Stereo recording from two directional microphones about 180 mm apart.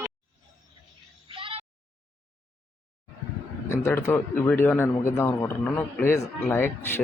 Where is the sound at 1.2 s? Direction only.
30° right (ahead or behind).